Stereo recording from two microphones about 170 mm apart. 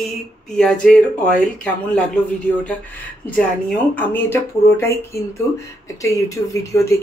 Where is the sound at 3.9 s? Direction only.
10° left (ahead or behind).